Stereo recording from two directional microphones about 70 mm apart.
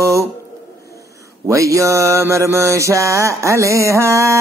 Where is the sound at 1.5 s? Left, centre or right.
Right.